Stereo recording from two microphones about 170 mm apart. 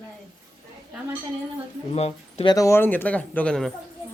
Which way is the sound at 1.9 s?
40° left (ahead or behind).